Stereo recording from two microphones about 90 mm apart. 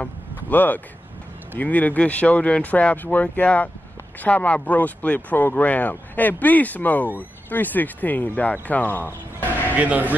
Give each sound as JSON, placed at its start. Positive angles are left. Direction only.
{"t": 0.0, "sound": "vehicle", "side_deg": 20}
{"t": 1.6, "sound": "speech", "side_deg": 20}
{"t": 9.8, "sound": "a man's voice", "side_deg": -15}